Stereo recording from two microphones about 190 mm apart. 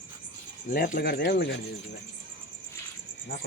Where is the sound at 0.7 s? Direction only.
50° left (ahead or behind).